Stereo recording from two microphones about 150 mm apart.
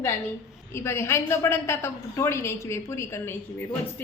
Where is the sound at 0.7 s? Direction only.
20° left (ahead or behind).